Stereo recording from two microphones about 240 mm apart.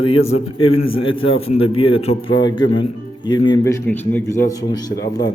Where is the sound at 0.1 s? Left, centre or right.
Left.